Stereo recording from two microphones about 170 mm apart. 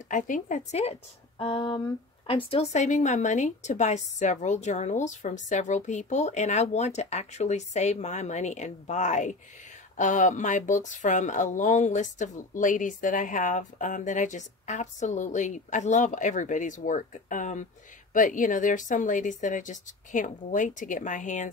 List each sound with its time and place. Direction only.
0.1 s speech: 50° left (ahead or behind)
1.4 s a sound: 30° left (ahead or behind)
2.2 s speech: 35° left (ahead or behind)